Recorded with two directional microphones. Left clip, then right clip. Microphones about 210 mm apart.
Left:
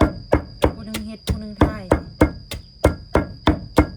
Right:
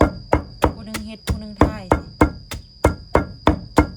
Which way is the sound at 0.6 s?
5° right (ahead or behind).